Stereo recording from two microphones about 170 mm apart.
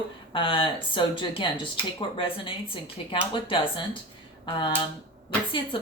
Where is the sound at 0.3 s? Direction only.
30° left (ahead or behind).